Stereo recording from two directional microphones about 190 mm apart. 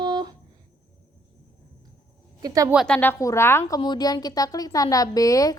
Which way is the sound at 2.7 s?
Centre (ahead or behind).